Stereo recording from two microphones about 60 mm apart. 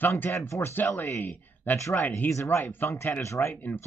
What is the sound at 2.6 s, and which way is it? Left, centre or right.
Speech, left.